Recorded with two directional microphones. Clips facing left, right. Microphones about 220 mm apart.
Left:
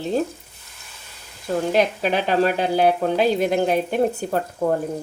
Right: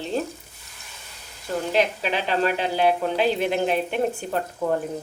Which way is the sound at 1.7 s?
45° left (ahead or behind).